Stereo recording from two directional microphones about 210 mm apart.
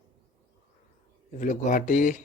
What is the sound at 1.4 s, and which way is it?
Speech, 35° left (ahead or behind).